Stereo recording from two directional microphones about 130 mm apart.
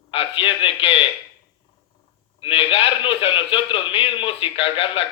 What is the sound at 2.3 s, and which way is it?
A man's voice, 45° left (ahead or behind).